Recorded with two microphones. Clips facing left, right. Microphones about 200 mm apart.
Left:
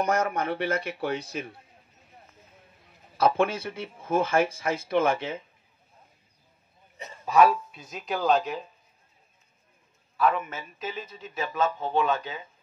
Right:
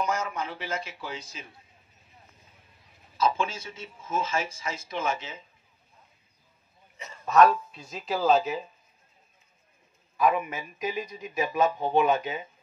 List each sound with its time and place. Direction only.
0.0 s speech: 60° left (ahead or behind)
3.2 s speech: 60° left (ahead or behind)
7.1 s a man's voice: 10° left (ahead or behind)
10.1 s speech: 10° right (ahead or behind)